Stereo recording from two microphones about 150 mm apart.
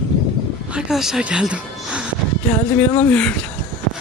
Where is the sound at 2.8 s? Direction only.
10° left (ahead or behind).